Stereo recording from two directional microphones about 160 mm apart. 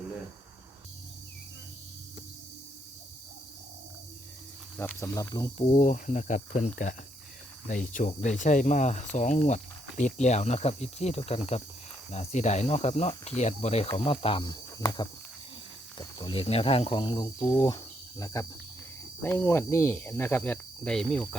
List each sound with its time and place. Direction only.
4.8 s speech: 15° left (ahead or behind)
5.7 s speech: 50° left (ahead or behind)
13.8 s speech: 35° left (ahead or behind)
17.5 s insect: 25° left (ahead or behind)
19.2 s speech: 10° left (ahead or behind)